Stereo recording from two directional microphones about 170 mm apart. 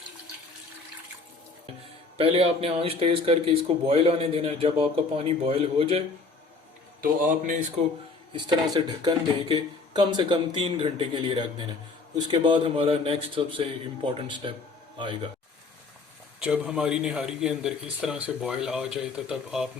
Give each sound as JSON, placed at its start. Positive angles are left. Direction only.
{"t": 2.1, "sound": "speech", "side_deg": -35}
{"t": 7.0, "sound": "a man's voice", "side_deg": -55}
{"t": 8.3, "sound": "speech", "side_deg": -25}
{"t": 16.4, "sound": "speech", "side_deg": -5}